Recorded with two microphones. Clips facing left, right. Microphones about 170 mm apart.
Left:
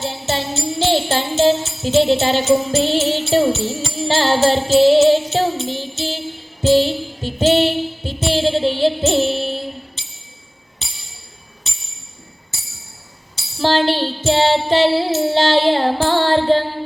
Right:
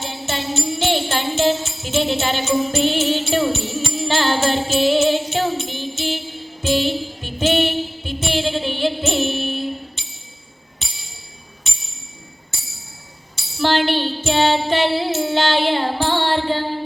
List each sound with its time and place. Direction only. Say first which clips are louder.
0.0 s music: left 3 dB; 35° left (ahead or behind)
13.6 s child singing: left 2 dB; 35° left (ahead or behind)